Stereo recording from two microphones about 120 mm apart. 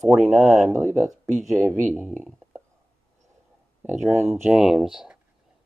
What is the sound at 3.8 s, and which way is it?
Speech, 15° right (ahead or behind).